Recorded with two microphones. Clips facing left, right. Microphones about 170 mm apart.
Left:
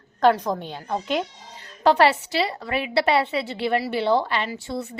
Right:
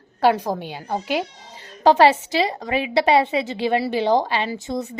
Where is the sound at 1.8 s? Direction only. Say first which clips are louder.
Right 3 dB; 15° right (ahead or behind).